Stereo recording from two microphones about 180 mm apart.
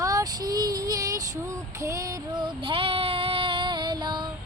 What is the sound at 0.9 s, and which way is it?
Child singing, 20° right (ahead or behind).